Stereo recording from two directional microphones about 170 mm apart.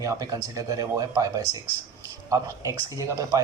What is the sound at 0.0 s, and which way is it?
Speech, 20° right (ahead or behind).